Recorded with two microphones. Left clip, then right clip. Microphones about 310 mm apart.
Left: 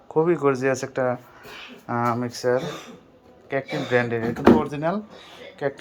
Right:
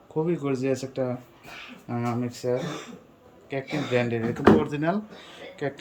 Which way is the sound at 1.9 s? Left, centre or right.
Centre.